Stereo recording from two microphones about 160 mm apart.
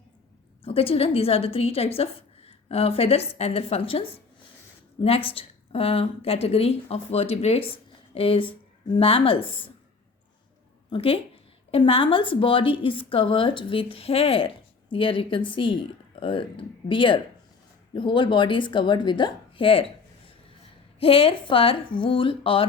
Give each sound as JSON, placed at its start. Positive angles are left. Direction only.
{"t": 0.6, "sound": "a woman's voice", "side_deg": 35}
{"t": 10.8, "sound": "a woman's voice", "side_deg": 35}
{"t": 21.0, "sound": "a woman's voice", "side_deg": 35}